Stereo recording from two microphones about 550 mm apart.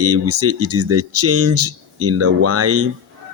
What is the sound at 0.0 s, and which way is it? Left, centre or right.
Speech, right.